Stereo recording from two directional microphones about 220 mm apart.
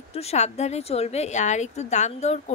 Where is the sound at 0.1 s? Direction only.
30° left (ahead or behind).